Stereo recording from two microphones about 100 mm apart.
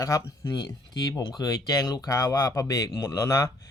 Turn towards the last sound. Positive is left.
turn(degrees=35)  # may be behind; listen again after turning